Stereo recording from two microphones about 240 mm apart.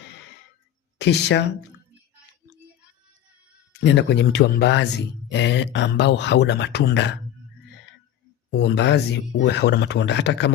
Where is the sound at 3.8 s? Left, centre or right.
Left.